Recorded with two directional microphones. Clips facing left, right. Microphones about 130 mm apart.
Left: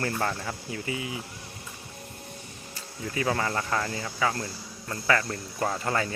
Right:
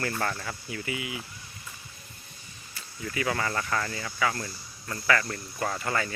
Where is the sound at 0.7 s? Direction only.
30° left (ahead or behind).